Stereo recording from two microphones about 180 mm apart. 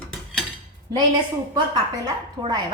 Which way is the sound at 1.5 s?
25° right (ahead or behind).